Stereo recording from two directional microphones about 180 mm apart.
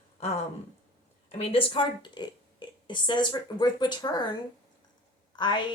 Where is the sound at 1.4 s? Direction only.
30° left (ahead or behind).